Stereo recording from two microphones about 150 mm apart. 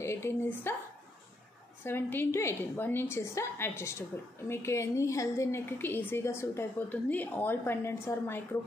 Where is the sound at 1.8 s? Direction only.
15° left (ahead or behind).